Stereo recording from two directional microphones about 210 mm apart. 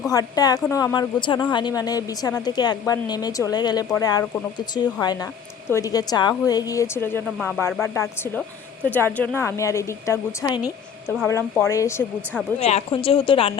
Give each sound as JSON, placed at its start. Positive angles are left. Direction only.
{"t": 0.1, "sound": "a woman's voice", "side_deg": 15}
{"t": 7.3, "sound": "speech", "side_deg": 0}
{"t": 7.8, "sound": "a woman's voice", "side_deg": 10}
{"t": 12.5, "sound": "a woman's voice", "side_deg": 30}